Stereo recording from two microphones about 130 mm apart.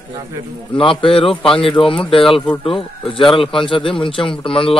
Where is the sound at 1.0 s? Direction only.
45° left (ahead or behind).